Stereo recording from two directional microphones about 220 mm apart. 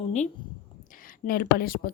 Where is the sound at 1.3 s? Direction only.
40° left (ahead or behind).